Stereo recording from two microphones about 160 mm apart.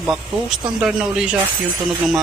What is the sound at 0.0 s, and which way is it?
Speech, 5° right (ahead or behind).